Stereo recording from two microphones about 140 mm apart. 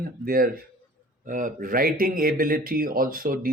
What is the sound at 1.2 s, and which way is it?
Speech, 70° right (ahead or behind).